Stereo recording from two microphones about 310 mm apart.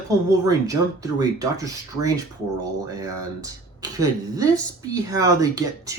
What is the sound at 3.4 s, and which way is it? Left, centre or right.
Speech, centre.